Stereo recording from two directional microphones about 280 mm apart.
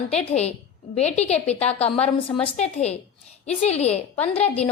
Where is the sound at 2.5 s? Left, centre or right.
Left.